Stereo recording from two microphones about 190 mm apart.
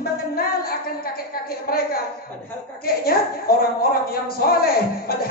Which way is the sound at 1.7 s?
50° left (ahead or behind).